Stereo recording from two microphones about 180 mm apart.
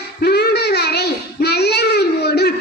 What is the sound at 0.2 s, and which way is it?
Child singing, 65° left (ahead or behind).